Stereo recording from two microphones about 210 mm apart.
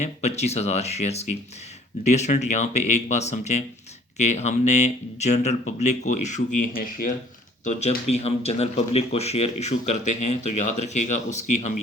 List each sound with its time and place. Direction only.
0.0 s a man's voice: 30° left (ahead or behind)